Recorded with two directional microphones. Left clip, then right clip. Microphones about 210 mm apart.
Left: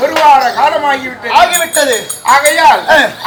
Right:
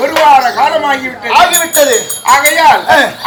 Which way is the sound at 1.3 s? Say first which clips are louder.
Right 1 dB; 15° left (ahead or behind).